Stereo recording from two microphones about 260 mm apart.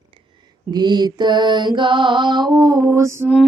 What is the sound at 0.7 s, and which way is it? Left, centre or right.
Humming, centre.